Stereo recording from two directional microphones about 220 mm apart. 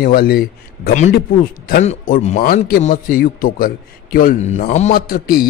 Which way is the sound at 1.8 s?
30° left (ahead or behind).